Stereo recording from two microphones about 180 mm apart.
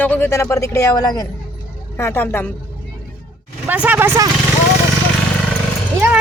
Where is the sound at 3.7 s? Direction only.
10° right (ahead or behind).